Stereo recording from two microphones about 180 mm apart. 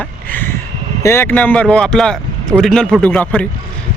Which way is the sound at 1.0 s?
15° left (ahead or behind).